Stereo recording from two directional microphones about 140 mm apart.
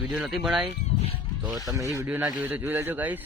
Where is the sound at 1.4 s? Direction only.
25° right (ahead or behind).